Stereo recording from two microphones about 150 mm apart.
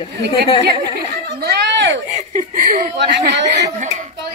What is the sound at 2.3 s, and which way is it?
Speech, 70° right (ahead or behind).